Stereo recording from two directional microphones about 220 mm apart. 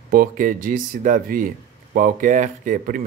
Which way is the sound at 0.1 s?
40° right (ahead or behind).